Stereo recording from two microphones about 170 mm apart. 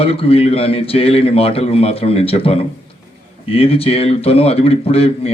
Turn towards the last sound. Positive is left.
turn(degrees=35)  # may be behind; listen again after turning